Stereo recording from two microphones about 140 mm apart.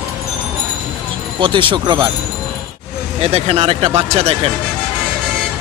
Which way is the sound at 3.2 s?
45° right (ahead or behind).